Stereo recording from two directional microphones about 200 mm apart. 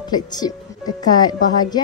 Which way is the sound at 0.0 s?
20° left (ahead or behind).